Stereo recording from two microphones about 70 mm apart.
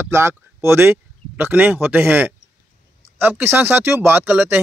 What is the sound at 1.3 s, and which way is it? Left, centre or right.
Speech, right.